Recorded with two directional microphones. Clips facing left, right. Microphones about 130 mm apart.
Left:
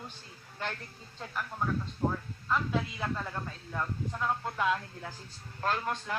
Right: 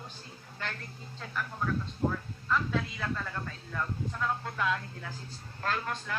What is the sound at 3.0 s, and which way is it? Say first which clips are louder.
Speech: left 1 dB; 20° left (ahead or behind).